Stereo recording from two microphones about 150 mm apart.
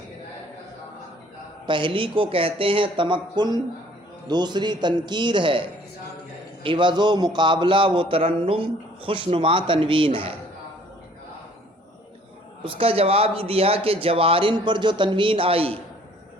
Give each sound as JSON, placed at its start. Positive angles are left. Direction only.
{"t": 1.6, "sound": "a man's voice", "side_deg": -35}
{"t": 12.6, "sound": "a man's voice", "side_deg": -40}